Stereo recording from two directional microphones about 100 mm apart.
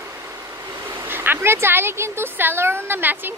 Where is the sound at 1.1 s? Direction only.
20° right (ahead or behind).